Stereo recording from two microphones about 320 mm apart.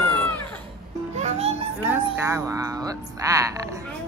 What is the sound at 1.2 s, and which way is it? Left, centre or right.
Music, right.